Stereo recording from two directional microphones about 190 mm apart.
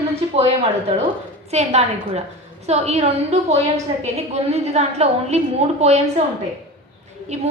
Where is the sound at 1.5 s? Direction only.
35° right (ahead or behind).